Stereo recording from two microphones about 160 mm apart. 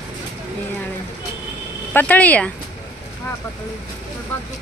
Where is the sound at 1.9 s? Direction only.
10° left (ahead or behind).